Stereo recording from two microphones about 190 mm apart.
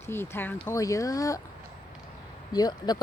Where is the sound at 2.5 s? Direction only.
20° left (ahead or behind).